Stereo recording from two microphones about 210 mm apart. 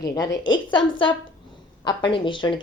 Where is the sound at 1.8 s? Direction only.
25° left (ahead or behind).